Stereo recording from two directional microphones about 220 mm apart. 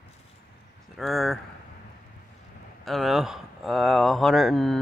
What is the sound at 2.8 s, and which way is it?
Speech, centre (ahead or behind).